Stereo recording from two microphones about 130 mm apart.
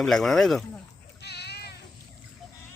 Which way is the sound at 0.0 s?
5° left (ahead or behind).